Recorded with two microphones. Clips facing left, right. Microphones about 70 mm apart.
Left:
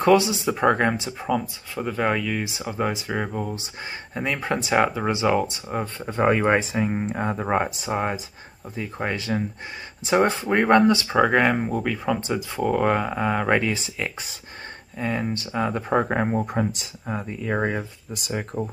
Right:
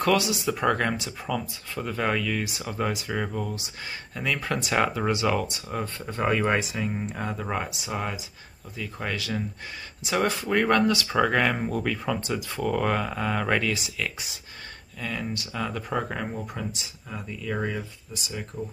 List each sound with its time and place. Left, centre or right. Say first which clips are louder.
0.0 s speech: left 5 dB; left
18.1 s speech: left 7 dB; left